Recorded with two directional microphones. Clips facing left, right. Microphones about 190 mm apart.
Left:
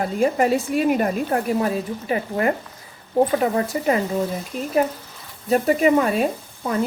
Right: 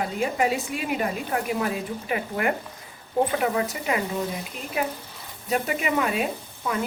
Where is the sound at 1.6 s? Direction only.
30° left (ahead or behind).